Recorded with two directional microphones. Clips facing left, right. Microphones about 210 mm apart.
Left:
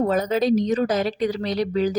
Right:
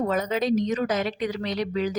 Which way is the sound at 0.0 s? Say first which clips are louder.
Left 4 dB; 35° left (ahead or behind).